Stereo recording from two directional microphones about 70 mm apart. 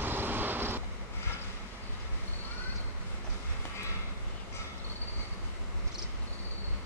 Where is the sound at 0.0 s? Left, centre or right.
Right.